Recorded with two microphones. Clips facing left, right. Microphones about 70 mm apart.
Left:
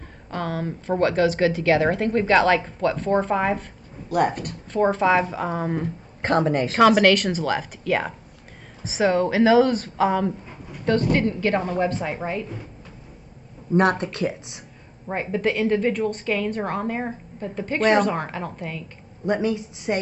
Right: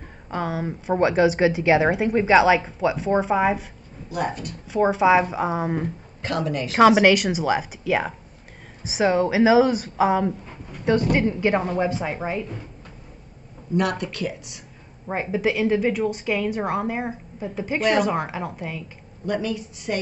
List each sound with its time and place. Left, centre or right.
0.3 s a woman's voice: centre
4.1 s speech: left
4.6 s a woman's voice: centre
6.2 s a woman's voice: left
6.8 s a woman's voice: centre
13.7 s speech: left
15.0 s a woman's voice: centre
19.2 s speech: left